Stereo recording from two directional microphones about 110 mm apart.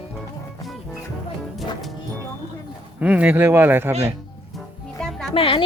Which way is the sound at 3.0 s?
10° right (ahead or behind).